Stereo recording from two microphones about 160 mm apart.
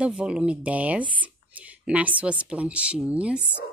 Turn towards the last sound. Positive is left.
turn(degrees=-5)  # may be behind; listen again after turning